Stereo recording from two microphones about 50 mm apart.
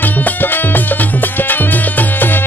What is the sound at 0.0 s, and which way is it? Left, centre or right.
Music, left.